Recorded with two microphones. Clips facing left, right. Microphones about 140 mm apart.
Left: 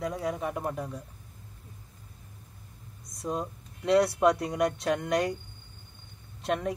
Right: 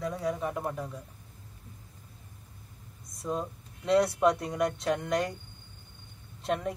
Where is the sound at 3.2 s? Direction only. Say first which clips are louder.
Even; 30° left (ahead or behind).